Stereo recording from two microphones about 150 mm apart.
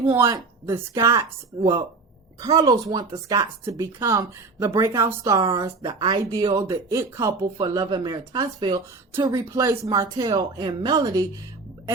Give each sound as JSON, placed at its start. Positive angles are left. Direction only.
{"t": 0.0, "sound": "speech", "side_deg": -20}